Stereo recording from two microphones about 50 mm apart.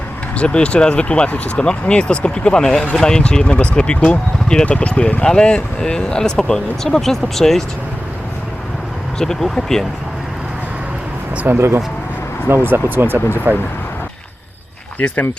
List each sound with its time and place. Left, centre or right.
0.3 s speech: left
9.1 s speech: centre
11.4 s speech: right
14.9 s speech: left